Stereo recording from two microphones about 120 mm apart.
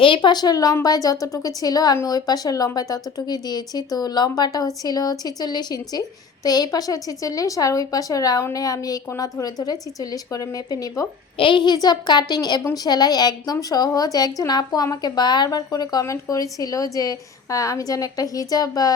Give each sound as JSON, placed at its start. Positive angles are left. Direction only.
{"t": 0.0, "sound": "a woman's voice", "side_deg": 45}
{"t": 11.3, "sound": "a woman's voice", "side_deg": 45}